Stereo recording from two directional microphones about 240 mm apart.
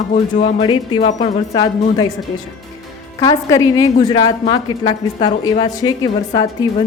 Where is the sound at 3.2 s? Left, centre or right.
Centre.